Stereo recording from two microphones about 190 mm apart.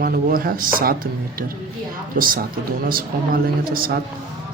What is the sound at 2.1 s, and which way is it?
Speech, 50° right (ahead or behind).